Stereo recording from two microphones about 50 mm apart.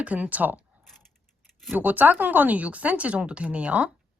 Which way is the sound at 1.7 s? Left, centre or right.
Right.